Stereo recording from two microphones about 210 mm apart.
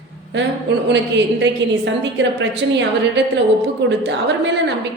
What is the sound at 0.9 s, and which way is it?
A woman's voice, 55° right (ahead or behind).